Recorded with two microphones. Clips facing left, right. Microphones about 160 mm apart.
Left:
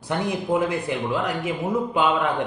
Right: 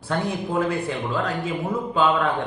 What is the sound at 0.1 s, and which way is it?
A man's voice, 15° left (ahead or behind).